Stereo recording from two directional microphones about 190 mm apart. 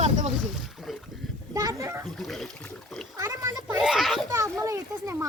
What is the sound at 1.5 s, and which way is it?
Speech, 20° right (ahead or behind).